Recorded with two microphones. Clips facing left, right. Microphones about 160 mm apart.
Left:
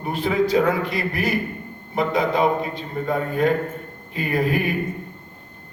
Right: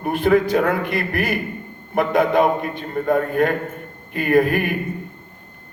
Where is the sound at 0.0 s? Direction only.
55° right (ahead or behind).